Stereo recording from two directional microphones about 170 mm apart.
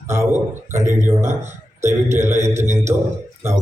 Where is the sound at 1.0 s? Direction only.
15° right (ahead or behind).